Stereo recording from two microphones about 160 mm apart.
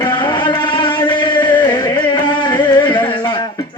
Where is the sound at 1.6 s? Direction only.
25° left (ahead or behind).